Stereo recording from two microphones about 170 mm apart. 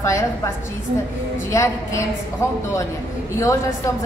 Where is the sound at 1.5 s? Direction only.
15° left (ahead or behind).